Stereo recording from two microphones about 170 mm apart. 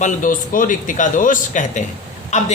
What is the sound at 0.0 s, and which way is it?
Speech, 50° left (ahead or behind).